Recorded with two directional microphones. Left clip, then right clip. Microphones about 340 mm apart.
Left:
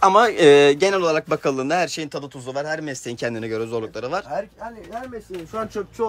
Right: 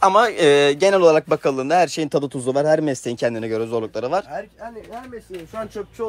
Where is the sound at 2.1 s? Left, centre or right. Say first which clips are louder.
Right 9 dB; right.